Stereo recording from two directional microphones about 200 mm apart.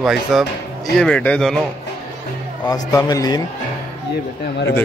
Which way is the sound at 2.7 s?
20° left (ahead or behind).